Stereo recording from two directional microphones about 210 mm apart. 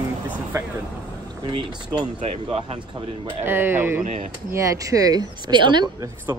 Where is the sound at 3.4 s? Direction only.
10° right (ahead or behind).